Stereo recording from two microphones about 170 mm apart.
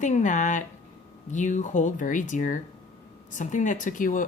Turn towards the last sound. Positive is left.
turn(degrees=50)  # may be behind; listen again after turning